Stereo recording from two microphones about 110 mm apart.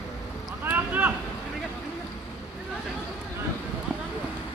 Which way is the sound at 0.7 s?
15° right (ahead or behind).